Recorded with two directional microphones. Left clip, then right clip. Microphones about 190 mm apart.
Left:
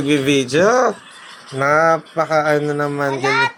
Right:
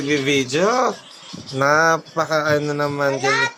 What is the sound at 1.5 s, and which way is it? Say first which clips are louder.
Speech: left 2 dB; 10° right (ahead or behind).